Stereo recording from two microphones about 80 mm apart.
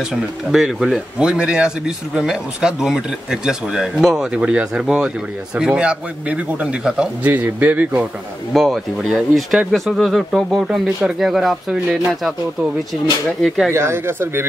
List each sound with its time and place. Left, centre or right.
0.1 s speech: centre
4.3 s speech: centre
7.2 s speech: right
8.5 s speech: centre
13.7 s speech: right